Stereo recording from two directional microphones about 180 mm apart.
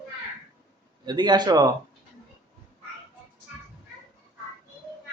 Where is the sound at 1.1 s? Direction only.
25° right (ahead or behind).